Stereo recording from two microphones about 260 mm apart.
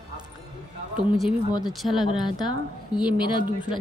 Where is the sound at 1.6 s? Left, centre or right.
Centre.